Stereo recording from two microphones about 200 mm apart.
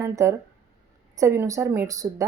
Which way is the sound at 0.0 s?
15° right (ahead or behind).